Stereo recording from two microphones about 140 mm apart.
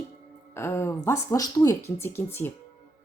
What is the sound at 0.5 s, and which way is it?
Speech, 20° left (ahead or behind).